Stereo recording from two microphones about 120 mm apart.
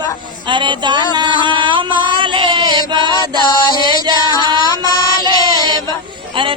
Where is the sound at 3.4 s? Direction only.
35° left (ahead or behind).